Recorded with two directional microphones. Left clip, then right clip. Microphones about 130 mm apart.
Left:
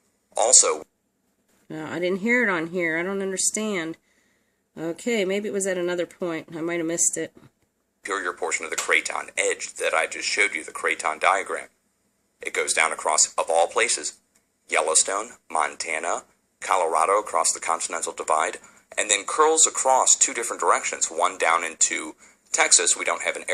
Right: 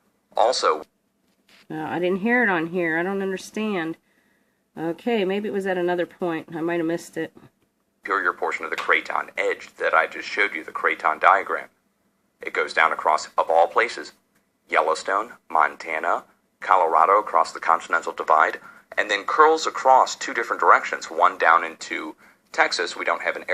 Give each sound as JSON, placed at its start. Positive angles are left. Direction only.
{"t": 0.3, "sound": "speech", "side_deg": 25}